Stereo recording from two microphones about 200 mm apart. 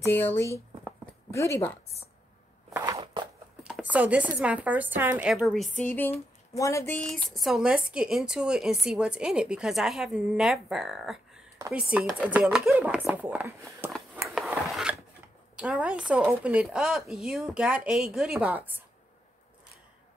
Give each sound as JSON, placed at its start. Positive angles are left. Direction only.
{"t": 0.0, "sound": "speech", "side_deg": 10}
{"t": 2.7, "sound": "a sound", "side_deg": -15}
{"t": 3.6, "sound": "speech", "side_deg": -5}
{"t": 14.3, "sound": "filing", "side_deg": -5}
{"t": 15.5, "sound": "speech", "side_deg": -5}